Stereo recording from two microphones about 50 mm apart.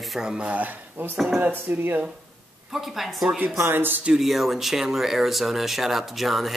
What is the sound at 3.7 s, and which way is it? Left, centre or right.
Speech, right.